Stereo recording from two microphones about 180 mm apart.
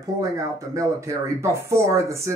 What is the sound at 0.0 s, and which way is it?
Speech, 20° right (ahead or behind).